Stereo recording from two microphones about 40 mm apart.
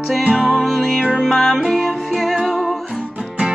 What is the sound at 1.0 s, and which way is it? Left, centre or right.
Music, centre.